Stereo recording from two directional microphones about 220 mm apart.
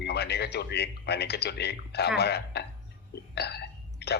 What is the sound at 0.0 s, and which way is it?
A man's voice, 50° left (ahead or behind).